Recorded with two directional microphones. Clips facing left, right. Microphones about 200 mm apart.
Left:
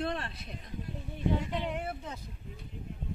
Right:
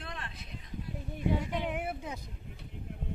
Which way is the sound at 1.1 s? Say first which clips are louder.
Even; 10° right (ahead or behind).